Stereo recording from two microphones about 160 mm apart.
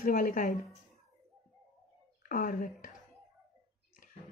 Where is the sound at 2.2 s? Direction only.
55° left (ahead or behind).